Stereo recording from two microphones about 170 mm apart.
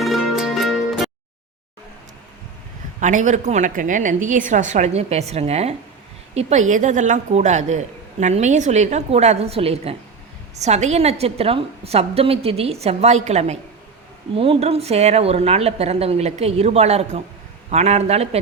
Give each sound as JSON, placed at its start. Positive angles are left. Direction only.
{"t": 0.0, "sound": "music", "side_deg": 0}
{"t": 3.0, "sound": "a woman's voice", "side_deg": -45}